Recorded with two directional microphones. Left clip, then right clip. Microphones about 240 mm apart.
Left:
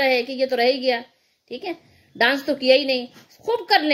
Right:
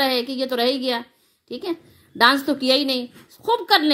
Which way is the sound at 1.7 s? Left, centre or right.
Right.